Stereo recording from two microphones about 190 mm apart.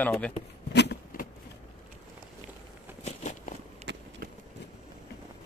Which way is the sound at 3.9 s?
65° right (ahead or behind).